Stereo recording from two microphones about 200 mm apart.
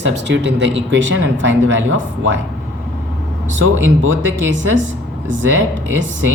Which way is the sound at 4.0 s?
70° right (ahead or behind).